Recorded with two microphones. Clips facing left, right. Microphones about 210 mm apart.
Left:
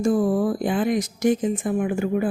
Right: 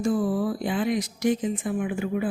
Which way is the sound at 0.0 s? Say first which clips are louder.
Left 4 dB; 45° left (ahead or behind).